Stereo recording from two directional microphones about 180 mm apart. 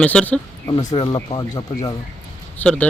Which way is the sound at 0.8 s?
20° left (ahead or behind).